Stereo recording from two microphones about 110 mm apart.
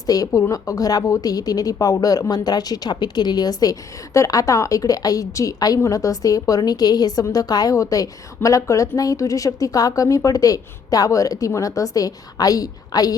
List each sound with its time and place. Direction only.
0.0 s a woman's voice: 35° left (ahead or behind)